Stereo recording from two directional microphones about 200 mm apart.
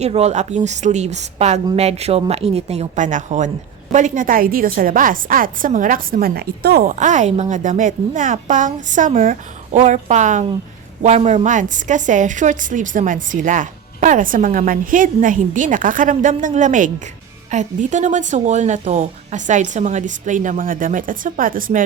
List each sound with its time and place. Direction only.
0.0 s a woman's voice: 30° right (ahead or behind)